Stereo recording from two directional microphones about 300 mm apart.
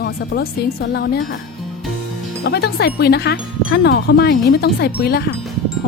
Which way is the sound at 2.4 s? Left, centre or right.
Left.